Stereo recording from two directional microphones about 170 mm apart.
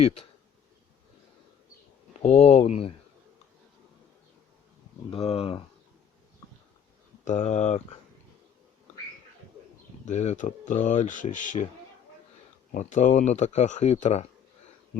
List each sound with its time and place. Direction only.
2.2 s speech: 40° left (ahead or behind)
5.1 s speech: 35° left (ahead or behind)
7.3 s speech: 40° left (ahead or behind)
10.1 s speech: 45° left (ahead or behind)
12.7 s speech: 45° left (ahead or behind)